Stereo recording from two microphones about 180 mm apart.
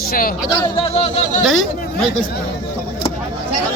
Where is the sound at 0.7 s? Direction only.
35° left (ahead or behind).